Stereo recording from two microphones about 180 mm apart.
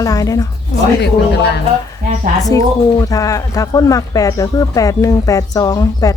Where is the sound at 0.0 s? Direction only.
20° left (ahead or behind).